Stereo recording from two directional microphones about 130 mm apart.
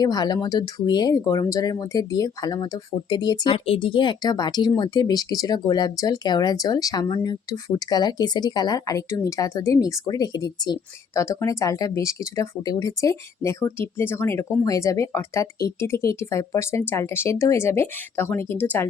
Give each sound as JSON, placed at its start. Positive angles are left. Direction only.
{"t": 0.0, "sound": "speech", "side_deg": 30}
{"t": 3.5, "sound": "speech", "side_deg": 45}